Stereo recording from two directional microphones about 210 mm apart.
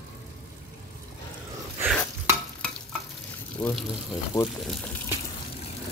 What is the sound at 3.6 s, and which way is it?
Speech, 15° left (ahead or behind).